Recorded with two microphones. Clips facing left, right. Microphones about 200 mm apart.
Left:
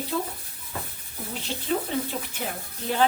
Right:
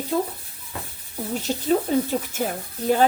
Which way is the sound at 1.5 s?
40° right (ahead or behind).